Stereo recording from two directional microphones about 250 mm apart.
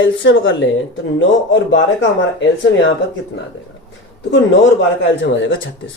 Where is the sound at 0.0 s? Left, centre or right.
Left.